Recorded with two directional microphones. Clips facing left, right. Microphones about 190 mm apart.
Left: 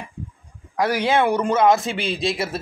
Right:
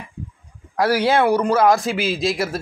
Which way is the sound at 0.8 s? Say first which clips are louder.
Right 2 dB; 15° left (ahead or behind).